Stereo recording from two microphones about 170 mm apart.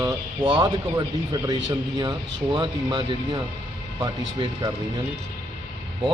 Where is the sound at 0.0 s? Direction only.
25° right (ahead or behind).